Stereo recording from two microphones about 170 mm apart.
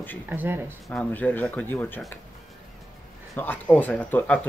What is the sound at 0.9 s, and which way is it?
Speech, 10° left (ahead or behind).